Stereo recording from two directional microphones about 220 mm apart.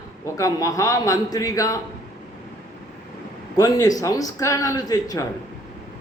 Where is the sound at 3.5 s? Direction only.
15° left (ahead or behind).